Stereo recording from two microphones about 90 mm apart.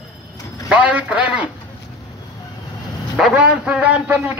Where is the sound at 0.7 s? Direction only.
15° right (ahead or behind).